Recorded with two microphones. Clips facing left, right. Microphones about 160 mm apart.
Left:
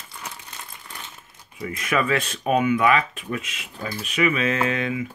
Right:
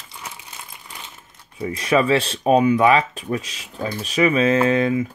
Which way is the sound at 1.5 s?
30° right (ahead or behind).